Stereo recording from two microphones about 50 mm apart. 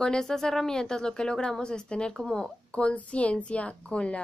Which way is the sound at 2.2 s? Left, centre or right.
Centre.